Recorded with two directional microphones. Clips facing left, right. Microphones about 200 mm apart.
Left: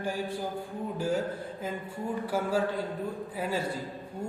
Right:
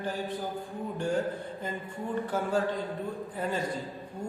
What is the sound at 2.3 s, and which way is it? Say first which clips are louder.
A man's voice: left 1 dB; 10° left (ahead or behind).